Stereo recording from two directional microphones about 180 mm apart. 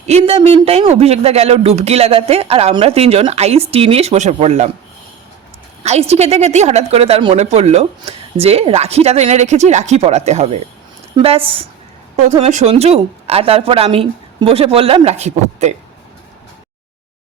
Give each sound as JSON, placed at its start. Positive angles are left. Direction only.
{"t": 0.1, "sound": "a woman's voice", "side_deg": -35}
{"t": 5.8, "sound": "a woman's voice", "side_deg": -35}